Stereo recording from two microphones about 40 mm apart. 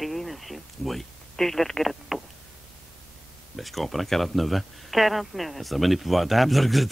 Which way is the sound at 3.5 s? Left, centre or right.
Centre.